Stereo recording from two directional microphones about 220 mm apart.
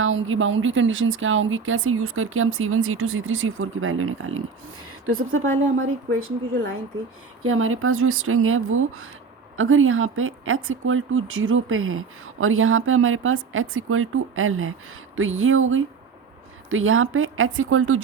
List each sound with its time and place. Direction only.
0.0 s speech: 65° right (ahead or behind)
7.4 s speech: 70° right (ahead or behind)